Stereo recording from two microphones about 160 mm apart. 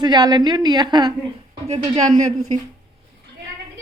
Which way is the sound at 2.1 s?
50° right (ahead or behind).